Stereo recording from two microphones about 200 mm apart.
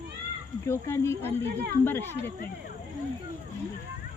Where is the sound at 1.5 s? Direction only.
55° right (ahead or behind).